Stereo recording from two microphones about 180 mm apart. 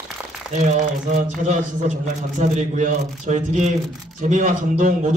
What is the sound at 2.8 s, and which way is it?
Speech, 40° right (ahead or behind).